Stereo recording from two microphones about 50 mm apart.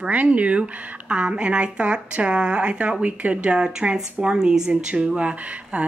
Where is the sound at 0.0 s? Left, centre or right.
Right.